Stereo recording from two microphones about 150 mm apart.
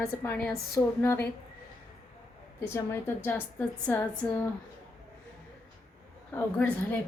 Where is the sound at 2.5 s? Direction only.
20° left (ahead or behind).